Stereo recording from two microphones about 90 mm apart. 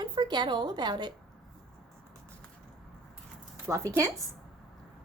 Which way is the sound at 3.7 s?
35° right (ahead or behind).